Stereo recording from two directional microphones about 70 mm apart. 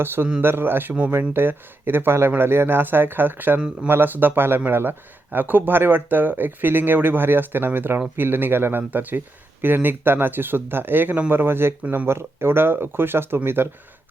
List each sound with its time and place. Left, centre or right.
0.0 s speech: right